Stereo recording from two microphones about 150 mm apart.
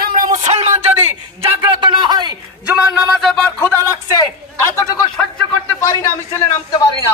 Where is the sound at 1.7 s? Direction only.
30° right (ahead or behind).